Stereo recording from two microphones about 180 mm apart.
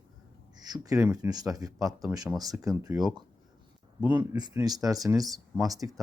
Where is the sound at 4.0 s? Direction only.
10° right (ahead or behind).